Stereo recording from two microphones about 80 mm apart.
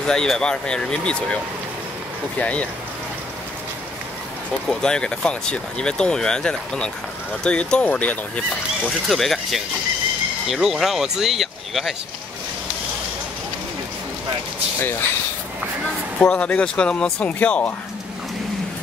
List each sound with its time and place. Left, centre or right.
0.0 s speech: centre
4.6 s speech: centre
9.1 s speech: centre
14.8 s speech: left
16.2 s speech: centre